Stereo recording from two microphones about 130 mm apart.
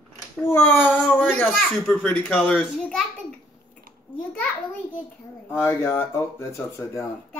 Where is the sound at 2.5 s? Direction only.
5° right (ahead or behind).